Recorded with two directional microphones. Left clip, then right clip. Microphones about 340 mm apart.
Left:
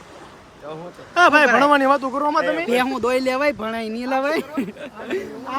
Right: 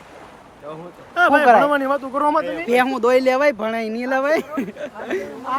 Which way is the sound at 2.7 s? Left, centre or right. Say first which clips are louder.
Right 4 dB; centre.